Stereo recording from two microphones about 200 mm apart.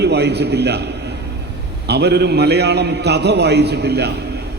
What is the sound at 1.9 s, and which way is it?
A man's voice, 55° right (ahead or behind).